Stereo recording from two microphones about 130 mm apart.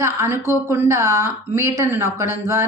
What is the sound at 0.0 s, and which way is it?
A woman's voice, 20° right (ahead or behind).